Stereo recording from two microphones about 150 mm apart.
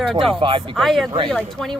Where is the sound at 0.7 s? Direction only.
Centre (ahead or behind).